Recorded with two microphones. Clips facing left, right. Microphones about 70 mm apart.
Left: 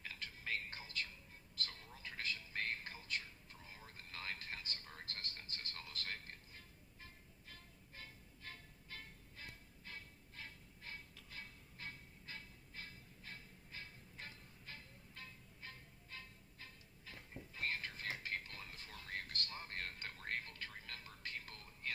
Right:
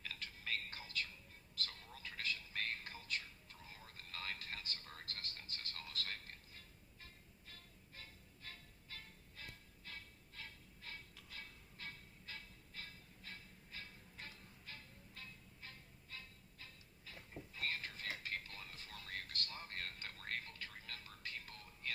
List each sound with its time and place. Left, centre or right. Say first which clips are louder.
0.0 s music: left 1 dB; left
1.5 s television: even; left
7.9 s music: left 2 dB; left
17.1 s television: even; left